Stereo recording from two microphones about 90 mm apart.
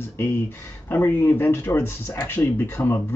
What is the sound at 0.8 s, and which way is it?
Speech, 25° left (ahead or behind).